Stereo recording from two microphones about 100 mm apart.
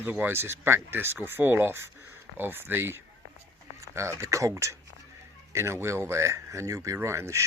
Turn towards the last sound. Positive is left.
turn(degrees=-30)  # may be behind; listen again after turning